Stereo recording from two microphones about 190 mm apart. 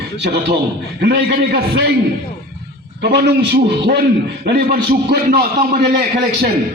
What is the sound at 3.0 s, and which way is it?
A man's voice, 60° right (ahead or behind).